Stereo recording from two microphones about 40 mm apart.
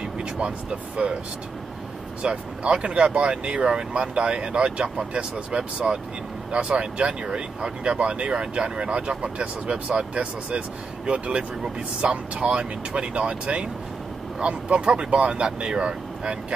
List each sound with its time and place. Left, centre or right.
0.2 s speech: right
2.2 s speech: right